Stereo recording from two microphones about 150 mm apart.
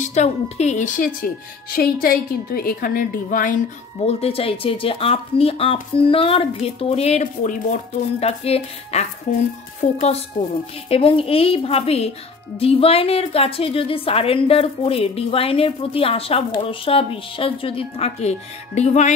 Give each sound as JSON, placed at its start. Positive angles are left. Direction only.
{"t": 0.0, "sound": "a woman's voice", "side_deg": 50}
{"t": 1.8, "sound": "a woman's voice", "side_deg": 80}
{"t": 4.0, "sound": "a woman's voice", "side_deg": 40}
{"t": 8.2, "sound": "speech", "side_deg": 45}
{"t": 10.9, "sound": "a woman's voice", "side_deg": 40}